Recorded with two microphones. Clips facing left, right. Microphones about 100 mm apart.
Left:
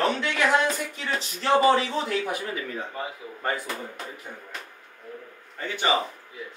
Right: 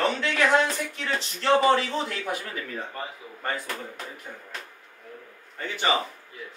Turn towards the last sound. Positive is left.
turn(degrees=0)  # may be behind; listen again after turning